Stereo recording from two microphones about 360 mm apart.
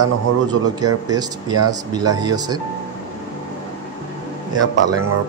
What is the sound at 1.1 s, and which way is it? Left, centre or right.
Speech, centre.